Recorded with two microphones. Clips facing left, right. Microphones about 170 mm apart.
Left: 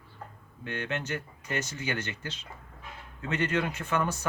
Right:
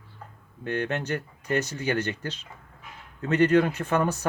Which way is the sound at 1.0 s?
60° right (ahead or behind).